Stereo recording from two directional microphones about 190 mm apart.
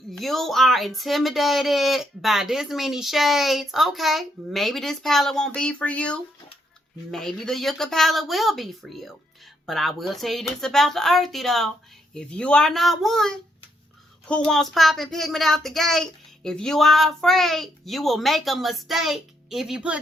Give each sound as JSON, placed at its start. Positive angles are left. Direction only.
{"t": 0.1, "sound": "speech", "side_deg": 0}